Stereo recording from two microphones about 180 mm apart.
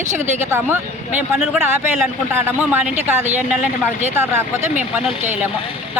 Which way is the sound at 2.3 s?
10° right (ahead or behind).